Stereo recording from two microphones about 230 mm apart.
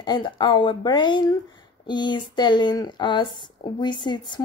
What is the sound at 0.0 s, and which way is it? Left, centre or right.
Speech, centre.